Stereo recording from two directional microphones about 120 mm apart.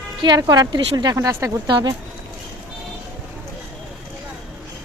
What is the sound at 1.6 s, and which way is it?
Speech, 35° right (ahead or behind).